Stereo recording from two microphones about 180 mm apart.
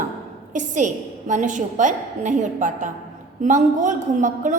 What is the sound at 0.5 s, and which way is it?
A woman's voice, 45° right (ahead or behind).